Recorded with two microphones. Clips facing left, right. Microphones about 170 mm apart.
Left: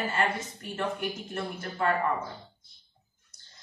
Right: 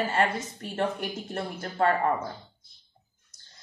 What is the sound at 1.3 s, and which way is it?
Speech, 40° right (ahead or behind).